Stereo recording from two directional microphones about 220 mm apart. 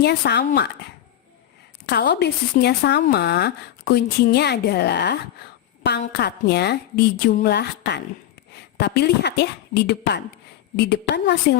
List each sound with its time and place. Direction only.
0.0 s speech: 45° left (ahead or behind)
1.9 s a woman's voice: 50° left (ahead or behind)